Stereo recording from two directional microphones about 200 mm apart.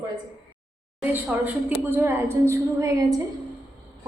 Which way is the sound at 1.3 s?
5° right (ahead or behind).